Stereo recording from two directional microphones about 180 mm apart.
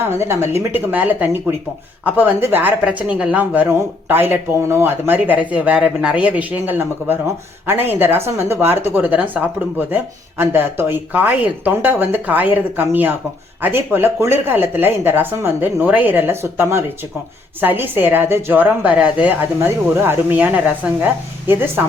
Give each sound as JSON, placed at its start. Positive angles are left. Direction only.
{"t": 0.0, "sound": "speech", "side_deg": -15}